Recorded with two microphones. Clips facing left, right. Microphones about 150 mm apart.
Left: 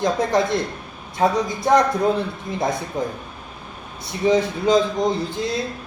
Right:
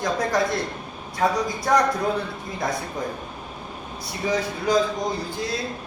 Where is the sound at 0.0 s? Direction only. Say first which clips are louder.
Left 3 dB; 20° left (ahead or behind).